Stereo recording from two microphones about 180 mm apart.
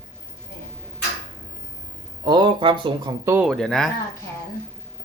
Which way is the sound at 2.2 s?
25° right (ahead or behind).